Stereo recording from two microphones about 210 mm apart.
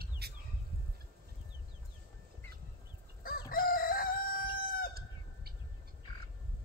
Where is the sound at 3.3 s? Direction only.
45° left (ahead or behind).